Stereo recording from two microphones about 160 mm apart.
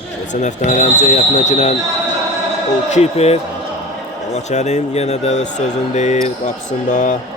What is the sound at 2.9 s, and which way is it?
Speech, 40° left (ahead or behind).